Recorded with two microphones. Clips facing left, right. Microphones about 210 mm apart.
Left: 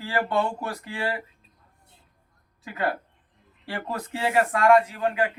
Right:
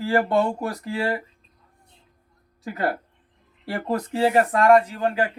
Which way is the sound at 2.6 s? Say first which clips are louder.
Right 2 dB; 35° right (ahead or behind).